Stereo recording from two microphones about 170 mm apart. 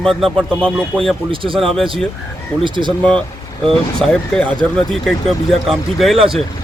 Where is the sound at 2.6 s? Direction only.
30° right (ahead or behind).